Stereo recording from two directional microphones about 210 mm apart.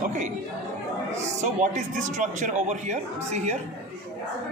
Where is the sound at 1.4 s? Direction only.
35° right (ahead or behind).